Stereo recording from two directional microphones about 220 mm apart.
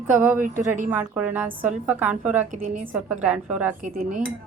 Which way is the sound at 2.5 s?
35° right (ahead or behind).